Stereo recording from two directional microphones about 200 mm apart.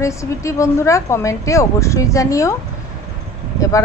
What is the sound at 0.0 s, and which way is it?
Speech, 15° left (ahead or behind).